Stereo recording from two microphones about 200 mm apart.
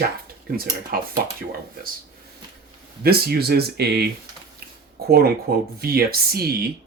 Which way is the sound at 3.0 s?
50° right (ahead or behind).